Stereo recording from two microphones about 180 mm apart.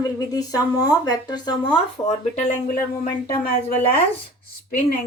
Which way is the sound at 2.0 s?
40° left (ahead or behind).